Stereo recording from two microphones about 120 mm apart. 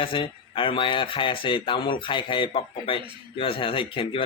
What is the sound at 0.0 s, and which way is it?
Speech, 45° left (ahead or behind).